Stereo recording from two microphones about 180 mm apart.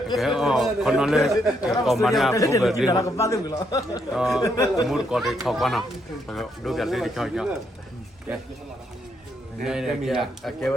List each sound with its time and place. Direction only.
0.2 s a man's voice: centre (ahead or behind)
2.3 s a man's voice: 15° left (ahead or behind)
2.6 s a man's voice: centre (ahead or behind)
2.9 s a man's voice: 20° left (ahead or behind)
4.1 s a man's voice: centre (ahead or behind)
4.4 s a man's voice: 20° left (ahead or behind)
4.9 s a man's voice: centre (ahead or behind)
9.6 s a man's voice: 5° right (ahead or behind)